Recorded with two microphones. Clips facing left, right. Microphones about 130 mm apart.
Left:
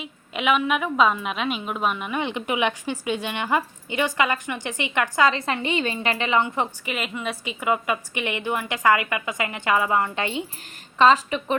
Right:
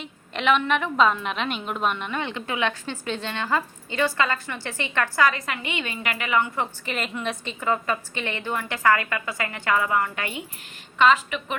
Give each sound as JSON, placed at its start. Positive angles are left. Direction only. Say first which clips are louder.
{"t": 0.0, "sound": "a woman's voice", "louder": "even", "side_deg": 10}
{"t": 6.8, "sound": "a woman's voice", "louder": "even", "side_deg": 5}